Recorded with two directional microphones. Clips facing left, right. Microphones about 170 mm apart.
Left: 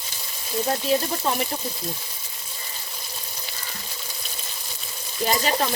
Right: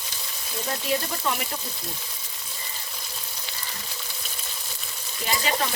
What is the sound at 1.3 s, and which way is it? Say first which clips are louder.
Frying: left 3 dB; 35° left (ahead or behind).